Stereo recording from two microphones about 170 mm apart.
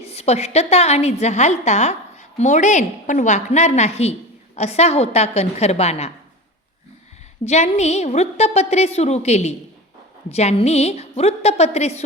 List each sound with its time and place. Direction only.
0.0 s a woman's voice: 40° left (ahead or behind)
7.4 s a woman's voice: 40° left (ahead or behind)